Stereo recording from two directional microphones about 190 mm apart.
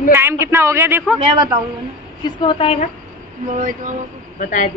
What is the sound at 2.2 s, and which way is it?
Speech, 25° left (ahead or behind).